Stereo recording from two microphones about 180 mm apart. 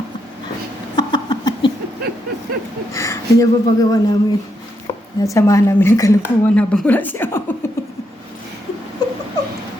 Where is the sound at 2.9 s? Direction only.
15° left (ahead or behind).